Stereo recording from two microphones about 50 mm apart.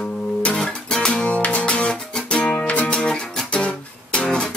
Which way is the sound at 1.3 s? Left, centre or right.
Left.